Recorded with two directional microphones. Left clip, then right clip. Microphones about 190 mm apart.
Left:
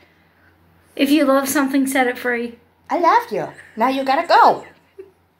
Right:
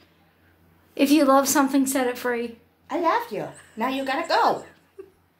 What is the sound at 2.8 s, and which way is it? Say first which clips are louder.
Speech: left 8 dB; 40° left (ahead or behind).